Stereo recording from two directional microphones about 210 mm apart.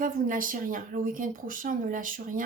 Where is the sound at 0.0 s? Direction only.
40° right (ahead or behind).